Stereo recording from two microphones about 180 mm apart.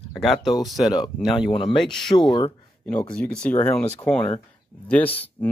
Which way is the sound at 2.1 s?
25° left (ahead or behind).